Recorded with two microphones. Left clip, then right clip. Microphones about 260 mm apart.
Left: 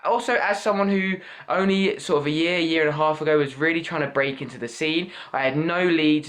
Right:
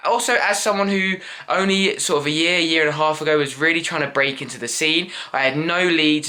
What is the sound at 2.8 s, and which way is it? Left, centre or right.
Speech, centre.